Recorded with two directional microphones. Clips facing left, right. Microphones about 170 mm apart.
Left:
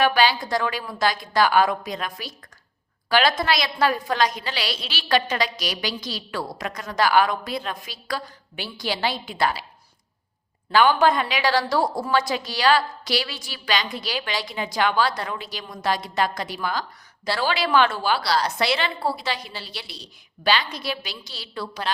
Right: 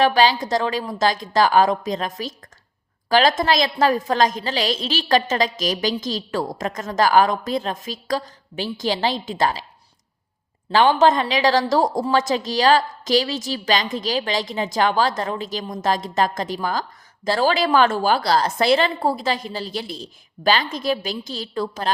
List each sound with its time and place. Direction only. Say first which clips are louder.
0.0 s a woman's voice: right 3 dB; 40° right (ahead or behind)
10.7 s a woman's voice: right 2 dB; 30° right (ahead or behind); by 21.8 s 45° right (ahead or behind)